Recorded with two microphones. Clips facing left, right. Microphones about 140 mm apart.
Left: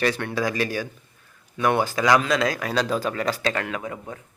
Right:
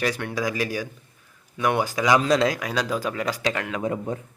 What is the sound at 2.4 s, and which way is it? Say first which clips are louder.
Speech: even; 15° right (ahead or behind).